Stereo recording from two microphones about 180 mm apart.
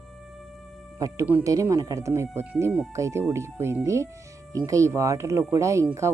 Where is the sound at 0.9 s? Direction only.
20° right (ahead or behind).